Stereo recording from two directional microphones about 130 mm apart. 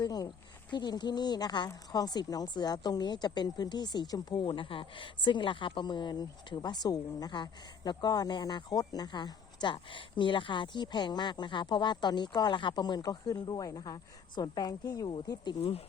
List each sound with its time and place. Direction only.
0.0 s a woman's voice: 30° left (ahead or behind)